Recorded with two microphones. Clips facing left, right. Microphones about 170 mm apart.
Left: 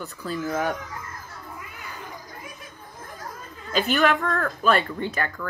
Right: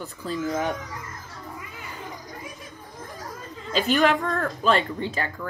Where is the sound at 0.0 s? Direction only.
25° right (ahead or behind).